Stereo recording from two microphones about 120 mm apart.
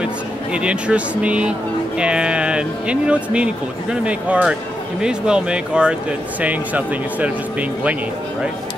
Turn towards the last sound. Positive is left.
turn(degrees=-10)  # may be behind; listen again after turning